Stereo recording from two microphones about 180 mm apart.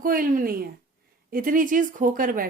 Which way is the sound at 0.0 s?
50° right (ahead or behind).